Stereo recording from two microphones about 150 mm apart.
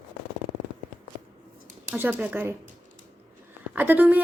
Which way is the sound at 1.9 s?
15° right (ahead or behind).